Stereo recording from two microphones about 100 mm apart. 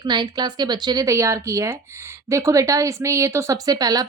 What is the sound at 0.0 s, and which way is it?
A woman's voice, 45° right (ahead or behind).